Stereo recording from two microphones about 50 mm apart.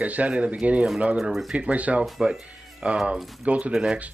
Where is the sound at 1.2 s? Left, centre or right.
Centre.